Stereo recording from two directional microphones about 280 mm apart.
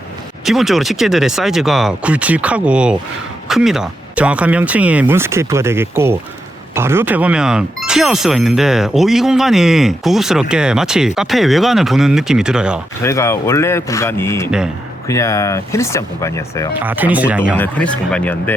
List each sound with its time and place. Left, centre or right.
0.4 s speech: centre
13.0 s speech: centre
16.8 s speech: centre